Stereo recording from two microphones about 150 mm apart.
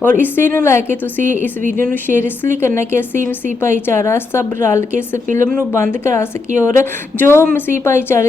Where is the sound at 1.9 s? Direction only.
15° left (ahead or behind).